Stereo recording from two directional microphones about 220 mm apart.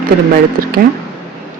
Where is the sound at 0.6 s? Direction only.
40° right (ahead or behind).